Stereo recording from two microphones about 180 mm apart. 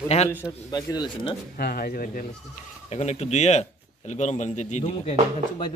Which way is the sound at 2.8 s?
40° left (ahead or behind).